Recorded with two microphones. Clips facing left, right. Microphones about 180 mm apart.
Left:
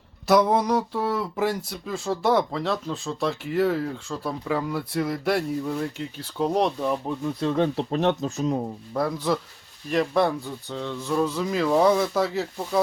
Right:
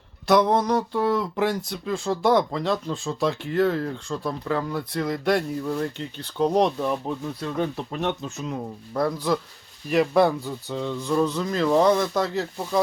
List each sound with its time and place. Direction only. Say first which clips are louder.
0.3 s speech: even; 5° left (ahead or behind)
7.4 s speech: left 5 dB; 30° left (ahead or behind)
8.9 s speech: right 2 dB; centre (ahead or behind)